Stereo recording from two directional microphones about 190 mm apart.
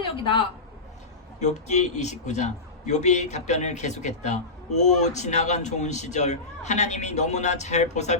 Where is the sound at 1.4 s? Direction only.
35° left (ahead or behind).